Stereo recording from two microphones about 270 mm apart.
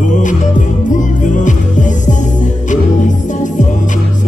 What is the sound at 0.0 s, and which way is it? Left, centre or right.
Music, left.